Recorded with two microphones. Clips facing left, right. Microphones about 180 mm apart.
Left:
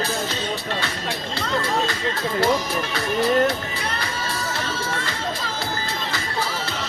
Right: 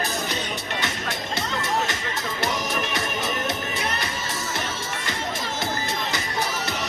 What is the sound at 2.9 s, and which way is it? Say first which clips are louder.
Music: left 8 dB; 20° right (ahead or behind).